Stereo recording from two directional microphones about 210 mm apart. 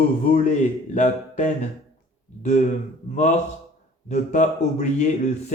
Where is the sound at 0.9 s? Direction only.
35° left (ahead or behind).